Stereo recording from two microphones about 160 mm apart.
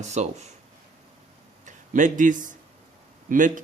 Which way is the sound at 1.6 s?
50° right (ahead or behind).